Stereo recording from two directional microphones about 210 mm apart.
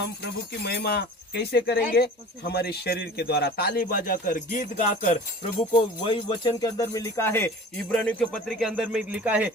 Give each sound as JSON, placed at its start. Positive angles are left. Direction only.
{"t": 0.2, "sound": "a man's voice", "side_deg": 50}
{"t": 5.7, "sound": "jingle bell", "side_deg": 25}